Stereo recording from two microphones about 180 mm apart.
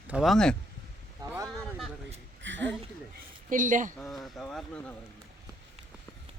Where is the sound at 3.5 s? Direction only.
45° right (ahead or behind).